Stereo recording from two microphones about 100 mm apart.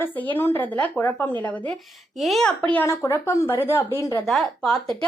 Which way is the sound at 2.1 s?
Centre (ahead or behind).